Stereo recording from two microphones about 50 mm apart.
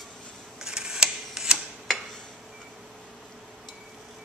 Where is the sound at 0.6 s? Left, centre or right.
Centre.